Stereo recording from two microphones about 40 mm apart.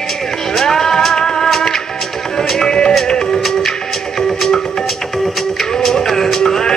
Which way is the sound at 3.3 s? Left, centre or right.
Centre.